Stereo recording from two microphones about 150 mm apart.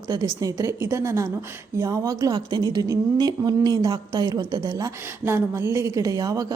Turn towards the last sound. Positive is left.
turn(degrees=-25)  # may be behind; listen again after turning